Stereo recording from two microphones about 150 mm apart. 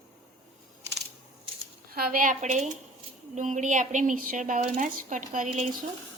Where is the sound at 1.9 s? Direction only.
85° right; by 5.5 s 60° right (ahead or behind).